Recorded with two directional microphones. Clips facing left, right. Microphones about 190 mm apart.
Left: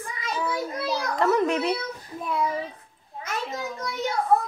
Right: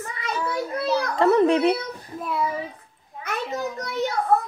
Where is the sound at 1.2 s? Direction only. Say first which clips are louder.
Right 5 dB; 30° right (ahead or behind).